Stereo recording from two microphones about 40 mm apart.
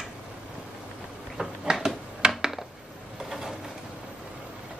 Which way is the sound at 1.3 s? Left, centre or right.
Centre.